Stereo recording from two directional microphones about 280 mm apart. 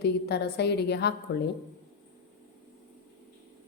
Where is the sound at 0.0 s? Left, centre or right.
Left.